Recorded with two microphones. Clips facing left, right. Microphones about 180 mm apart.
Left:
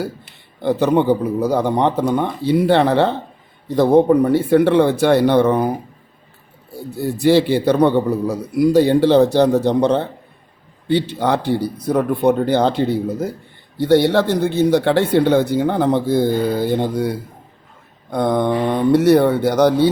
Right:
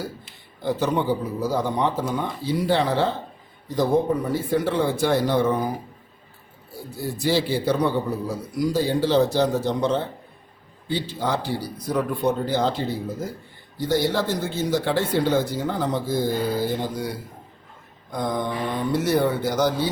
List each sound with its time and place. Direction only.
0.0 s speech: 60° left (ahead or behind)
7.2 s speech: 60° left (ahead or behind)